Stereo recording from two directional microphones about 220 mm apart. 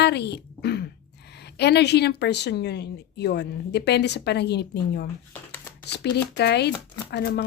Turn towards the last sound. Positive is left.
turn(degrees=50)  # may be behind; listen again after turning